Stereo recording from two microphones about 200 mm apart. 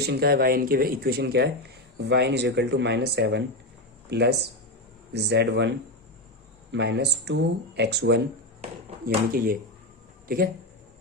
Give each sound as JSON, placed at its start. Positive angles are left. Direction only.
{"t": 0.0, "sound": "speech", "side_deg": -50}
{"t": 9.0, "sound": "speech", "side_deg": -45}